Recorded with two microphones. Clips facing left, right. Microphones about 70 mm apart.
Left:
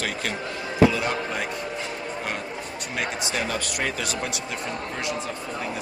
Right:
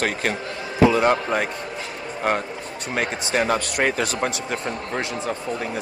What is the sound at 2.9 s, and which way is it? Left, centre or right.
A man's voice, right.